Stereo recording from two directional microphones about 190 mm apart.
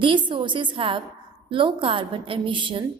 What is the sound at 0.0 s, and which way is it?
A woman's voice, 25° right (ahead or behind).